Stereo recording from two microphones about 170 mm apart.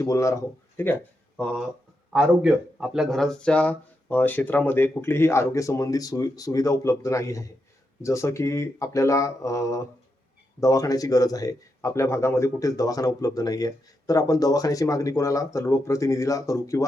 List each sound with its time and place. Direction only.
0.0 s speech: 20° left (ahead or behind)
2.1 s speech: 5° right (ahead or behind); by 16.8 s 20° left (ahead or behind)